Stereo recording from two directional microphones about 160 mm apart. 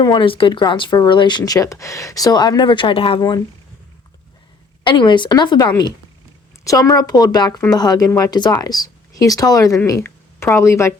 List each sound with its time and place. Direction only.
0.0 s speech: 30° left (ahead or behind)
4.8 s speech: 30° left (ahead or behind)